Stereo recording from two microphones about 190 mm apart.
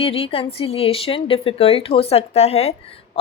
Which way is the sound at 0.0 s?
30° left (ahead or behind).